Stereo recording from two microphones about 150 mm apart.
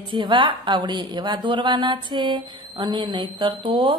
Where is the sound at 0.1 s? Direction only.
35° right (ahead or behind).